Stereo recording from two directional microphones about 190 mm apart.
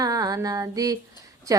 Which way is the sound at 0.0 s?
20° right (ahead or behind).